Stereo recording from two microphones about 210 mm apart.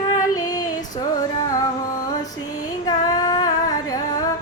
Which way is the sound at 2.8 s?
20° left (ahead or behind).